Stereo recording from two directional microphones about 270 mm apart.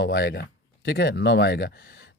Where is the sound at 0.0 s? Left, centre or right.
Left.